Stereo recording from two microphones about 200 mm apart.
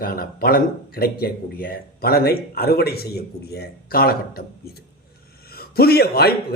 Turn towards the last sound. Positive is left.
turn(degrees=50)  # may be behind; listen again after turning